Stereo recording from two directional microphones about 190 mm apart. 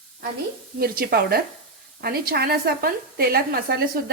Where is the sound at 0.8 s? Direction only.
55° right (ahead or behind).